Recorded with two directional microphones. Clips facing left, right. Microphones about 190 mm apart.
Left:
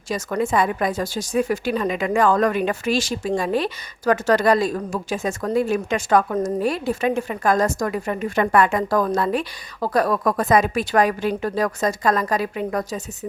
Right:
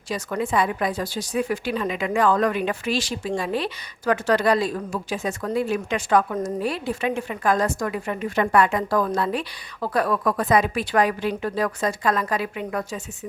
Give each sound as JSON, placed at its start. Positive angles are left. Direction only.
{"t": 0.1, "sound": "speech", "side_deg": 45}